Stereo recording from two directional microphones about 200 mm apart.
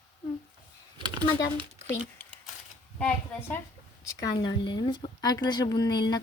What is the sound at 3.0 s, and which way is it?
Speech, 10° left (ahead or behind).